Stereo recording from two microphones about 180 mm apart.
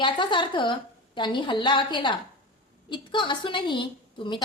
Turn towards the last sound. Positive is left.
turn(degrees=25)  # may be behind; listen again after turning